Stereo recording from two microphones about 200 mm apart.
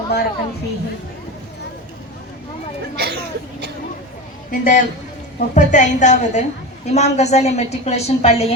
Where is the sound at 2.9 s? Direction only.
55° right (ahead or behind).